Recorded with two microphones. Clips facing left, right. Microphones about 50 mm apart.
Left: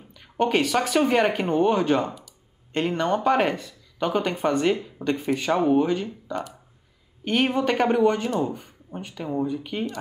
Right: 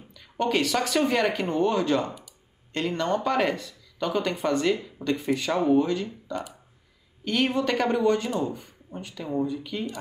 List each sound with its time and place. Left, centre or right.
0.1 s a sound: left
0.7 s speech: centre
3.3 s speech: left
7.4 s speech: centre